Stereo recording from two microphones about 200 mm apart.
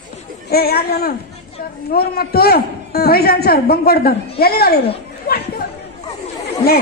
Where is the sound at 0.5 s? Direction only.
50° left (ahead or behind).